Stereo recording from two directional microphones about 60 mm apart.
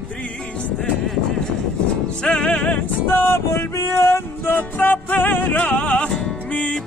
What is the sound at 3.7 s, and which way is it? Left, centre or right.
Music, left.